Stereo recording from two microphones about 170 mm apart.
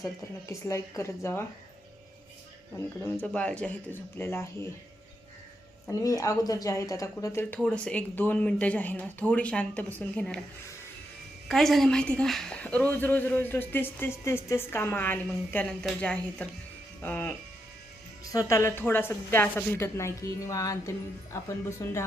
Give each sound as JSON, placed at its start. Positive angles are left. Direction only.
{"t": 0.0, "sound": "a woman's voice", "side_deg": 20}
{"t": 2.7, "sound": "a woman's voice", "side_deg": 10}
{"t": 5.9, "sound": "a woman's voice", "side_deg": 20}
{"t": 11.4, "sound": "a woman's voice", "side_deg": 0}